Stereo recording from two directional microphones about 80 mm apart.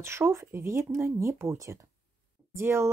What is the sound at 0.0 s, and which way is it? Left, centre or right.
Speech, right.